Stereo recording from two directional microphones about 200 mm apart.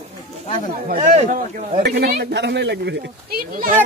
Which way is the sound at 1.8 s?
55° right (ahead or behind).